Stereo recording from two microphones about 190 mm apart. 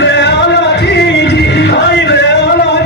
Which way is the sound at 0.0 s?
65° left (ahead or behind).